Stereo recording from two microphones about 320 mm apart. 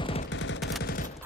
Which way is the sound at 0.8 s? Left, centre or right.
Left.